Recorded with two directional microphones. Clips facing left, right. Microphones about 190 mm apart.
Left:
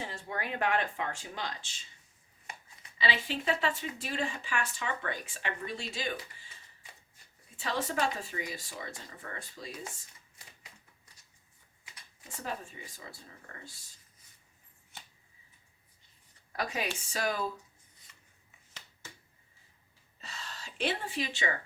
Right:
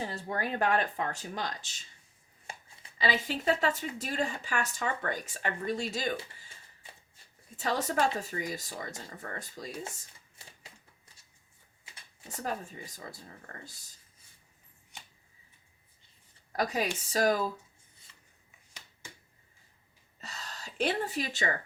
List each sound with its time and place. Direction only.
0.0 s speech: 40° right (ahead or behind)
2.5 s chopping: 30° right (ahead or behind)
3.0 s speech: 45° right (ahead or behind)
7.5 s speech: 45° right (ahead or behind)
10.4 s typewriter: 30° right (ahead or behind)
12.3 s speech: 40° right (ahead or behind)
14.9 s a sound: 15° right (ahead or behind)
16.5 s speech: 40° right (ahead or behind)
20.2 s gasp: 40° right (ahead or behind)